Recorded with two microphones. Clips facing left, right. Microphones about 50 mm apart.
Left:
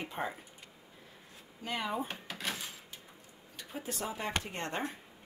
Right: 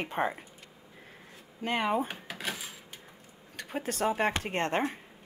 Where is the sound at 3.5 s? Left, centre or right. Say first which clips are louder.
Right 6 dB; right.